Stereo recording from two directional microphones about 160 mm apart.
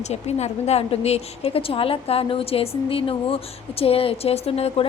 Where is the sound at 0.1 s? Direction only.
45° left (ahead or behind).